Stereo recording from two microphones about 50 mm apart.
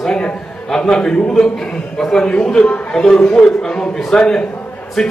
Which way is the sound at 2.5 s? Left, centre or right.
Left.